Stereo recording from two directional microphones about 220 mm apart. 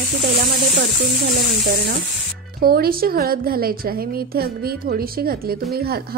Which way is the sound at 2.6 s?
45° right (ahead or behind).